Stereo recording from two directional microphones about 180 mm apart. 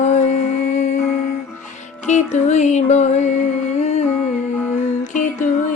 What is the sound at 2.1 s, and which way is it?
Music, 40° left (ahead or behind).